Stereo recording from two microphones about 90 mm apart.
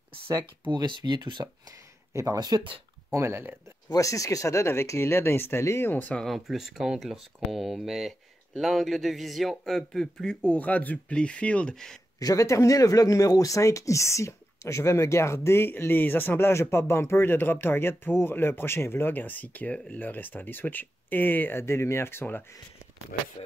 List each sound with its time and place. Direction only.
0.7 s speech: 60° right (ahead or behind)
3.1 s speech: 30° right (ahead or behind)
3.9 s speech: 35° left (ahead or behind); by 6.1 s 20° left (ahead or behind)
6.1 s speech: centre (ahead or behind)
12.2 s speech: 40° left (ahead or behind); by 22.4 s 25° left (ahead or behind)